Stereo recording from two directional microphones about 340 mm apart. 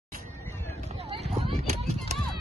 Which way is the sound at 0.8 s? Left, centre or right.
Centre.